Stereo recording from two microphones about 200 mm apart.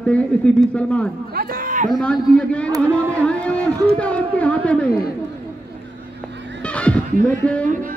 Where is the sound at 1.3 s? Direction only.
45° right (ahead or behind).